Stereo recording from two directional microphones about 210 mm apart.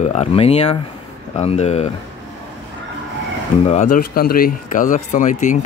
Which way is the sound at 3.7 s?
35° left (ahead or behind).